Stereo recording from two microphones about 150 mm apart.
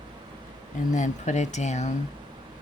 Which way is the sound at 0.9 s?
55° left (ahead or behind).